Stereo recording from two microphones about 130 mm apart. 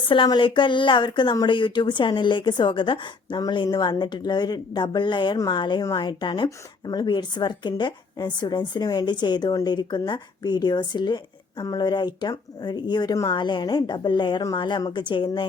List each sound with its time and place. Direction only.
0.0 s speech: 40° left (ahead or behind)